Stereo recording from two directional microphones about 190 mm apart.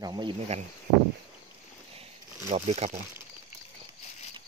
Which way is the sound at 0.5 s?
35° right (ahead or behind).